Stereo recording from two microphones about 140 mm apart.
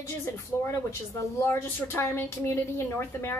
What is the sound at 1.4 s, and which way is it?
A woman's voice, 15° left (ahead or behind).